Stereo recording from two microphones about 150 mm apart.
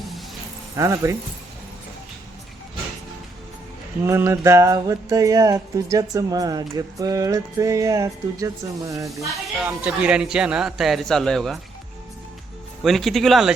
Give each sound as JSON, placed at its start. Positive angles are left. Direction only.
{"t": 0.8, "sound": "music", "side_deg": -20}
{"t": 4.0, "sound": "music", "side_deg": -20}
{"t": 9.6, "sound": "a man's voice", "side_deg": -10}
{"t": 12.8, "sound": "a man's voice", "side_deg": 0}